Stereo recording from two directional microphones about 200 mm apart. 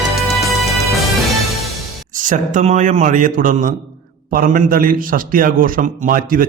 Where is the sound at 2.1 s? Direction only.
40° right (ahead or behind).